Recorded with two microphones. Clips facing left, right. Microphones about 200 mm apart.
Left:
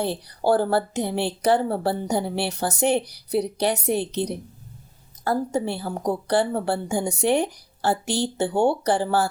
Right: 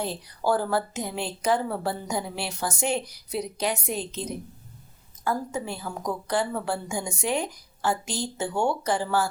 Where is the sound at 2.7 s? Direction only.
60° left (ahead or behind).